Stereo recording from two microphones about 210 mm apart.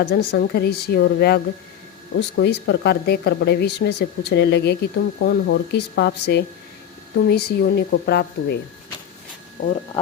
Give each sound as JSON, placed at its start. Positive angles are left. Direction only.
{"t": 0.0, "sound": "speech", "side_deg": 50}